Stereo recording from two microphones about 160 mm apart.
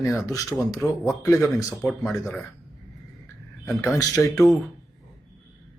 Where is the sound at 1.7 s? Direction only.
Centre (ahead or behind).